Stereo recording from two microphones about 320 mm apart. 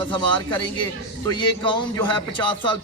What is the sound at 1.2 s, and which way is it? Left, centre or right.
Speech, centre.